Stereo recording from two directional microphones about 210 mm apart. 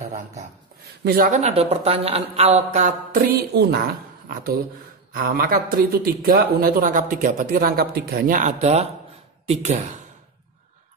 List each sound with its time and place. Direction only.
1.0 s a man's voice: 40° right (ahead or behind)